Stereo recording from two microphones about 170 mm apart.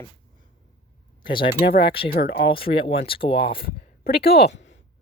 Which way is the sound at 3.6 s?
65° left (ahead or behind).